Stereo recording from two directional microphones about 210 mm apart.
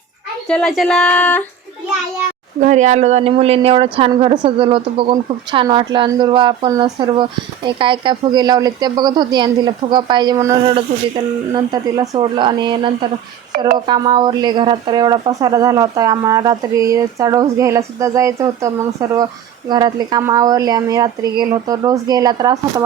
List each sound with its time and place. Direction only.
0.4 s speech: 5° left (ahead or behind)
2.6 s a woman's voice: 35° right (ahead or behind); by 22.5 s 20° right (ahead or behind)